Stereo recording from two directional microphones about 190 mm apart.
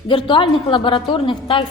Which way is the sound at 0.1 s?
25° left (ahead or behind).